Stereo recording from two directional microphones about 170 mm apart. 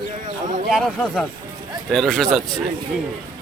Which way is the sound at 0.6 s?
Centre (ahead or behind).